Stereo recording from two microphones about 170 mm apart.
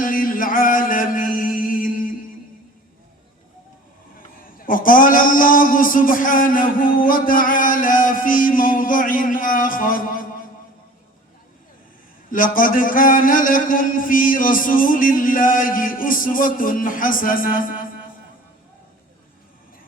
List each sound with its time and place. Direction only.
0.0 s chant: 55° left (ahead or behind)
4.5 s a man's voice: 55° left (ahead or behind)
12.3 s a man's voice: 55° left (ahead or behind)